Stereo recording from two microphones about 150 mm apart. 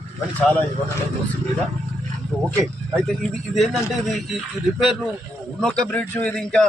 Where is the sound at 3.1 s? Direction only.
Centre (ahead or behind).